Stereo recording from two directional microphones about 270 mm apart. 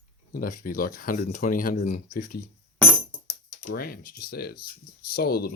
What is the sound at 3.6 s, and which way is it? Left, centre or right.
Speech, left.